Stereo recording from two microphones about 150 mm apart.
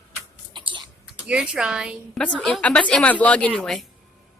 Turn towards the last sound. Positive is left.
turn(degrees=5)  # may be behind; listen again after turning